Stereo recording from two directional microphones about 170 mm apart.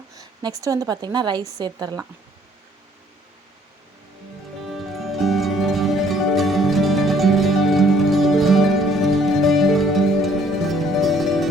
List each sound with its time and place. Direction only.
0.6 s a woman's voice: 20° right (ahead or behind)
4.7 s music: centre (ahead or behind)